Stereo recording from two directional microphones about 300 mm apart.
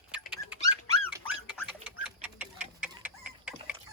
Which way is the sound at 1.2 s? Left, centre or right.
Centre.